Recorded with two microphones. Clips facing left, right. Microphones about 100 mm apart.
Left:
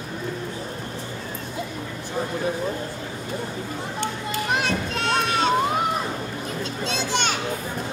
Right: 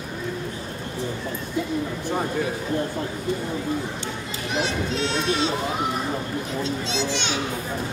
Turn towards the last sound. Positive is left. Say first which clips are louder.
# left 1 dB
turn(degrees=50)  # may be behind; listen again after turning